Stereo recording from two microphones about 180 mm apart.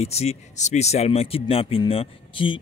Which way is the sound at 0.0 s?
35° left (ahead or behind).